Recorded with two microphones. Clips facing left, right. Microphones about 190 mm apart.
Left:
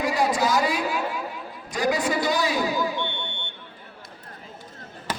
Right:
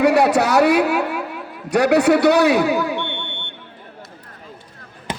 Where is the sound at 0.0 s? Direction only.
70° right (ahead or behind).